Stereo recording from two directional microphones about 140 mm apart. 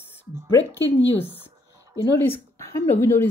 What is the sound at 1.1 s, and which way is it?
A woman's voice, 15° left (ahead or behind).